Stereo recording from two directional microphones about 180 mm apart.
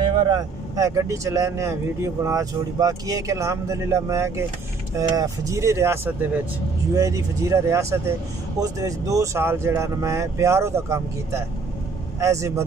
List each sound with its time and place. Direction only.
0.1 s speech: 25° right (ahead or behind)